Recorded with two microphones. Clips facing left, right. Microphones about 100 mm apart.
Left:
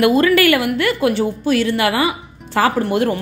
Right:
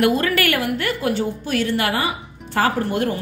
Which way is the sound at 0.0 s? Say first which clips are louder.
Left 5 dB; 90° left.